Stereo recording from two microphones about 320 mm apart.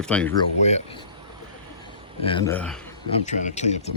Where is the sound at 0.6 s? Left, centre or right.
Centre.